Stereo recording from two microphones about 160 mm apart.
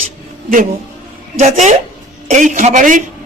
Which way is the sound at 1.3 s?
45° right (ahead or behind).